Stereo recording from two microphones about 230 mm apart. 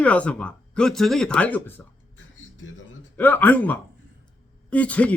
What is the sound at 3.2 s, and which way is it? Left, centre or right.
A man's voice, centre.